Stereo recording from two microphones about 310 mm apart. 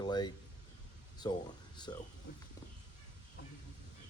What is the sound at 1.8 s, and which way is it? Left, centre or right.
Speech, centre.